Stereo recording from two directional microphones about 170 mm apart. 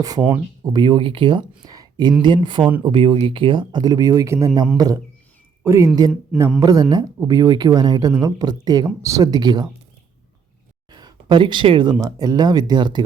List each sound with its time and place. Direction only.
0.2 s speech: 10° right (ahead or behind)
0.7 s speech: 30° right (ahead or behind)
10.9 s speech: 25° right (ahead or behind)